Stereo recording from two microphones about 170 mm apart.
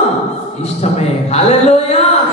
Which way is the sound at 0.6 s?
40° left (ahead or behind).